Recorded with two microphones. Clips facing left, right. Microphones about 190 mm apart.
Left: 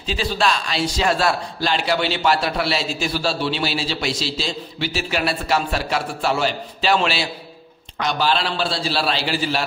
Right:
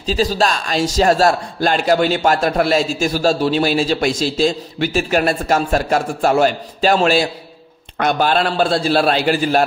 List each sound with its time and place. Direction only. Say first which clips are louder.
0.0 s a man's voice: right 5 dB; 40° right (ahead or behind)